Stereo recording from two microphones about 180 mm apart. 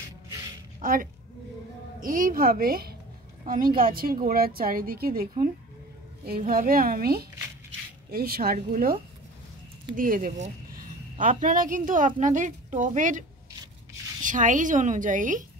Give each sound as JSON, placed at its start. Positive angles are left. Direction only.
{"t": 0.7, "sound": "a woman's voice", "side_deg": -50}
{"t": 9.9, "sound": "a woman's voice", "side_deg": -50}
{"t": 14.2, "sound": "a woman's voice", "side_deg": -45}